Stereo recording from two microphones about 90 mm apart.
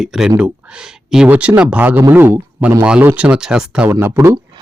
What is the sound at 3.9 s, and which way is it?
Speech, 25° right (ahead or behind).